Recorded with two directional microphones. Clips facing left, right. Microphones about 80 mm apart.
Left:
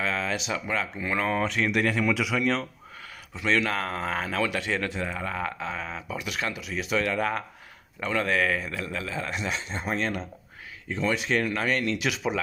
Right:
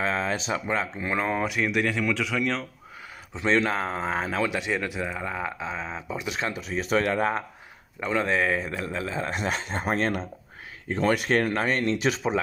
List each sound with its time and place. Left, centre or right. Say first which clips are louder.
0.0 s speech: right 2 dB; right; by 2.6 s centre
3.3 s speech: right 2 dB; right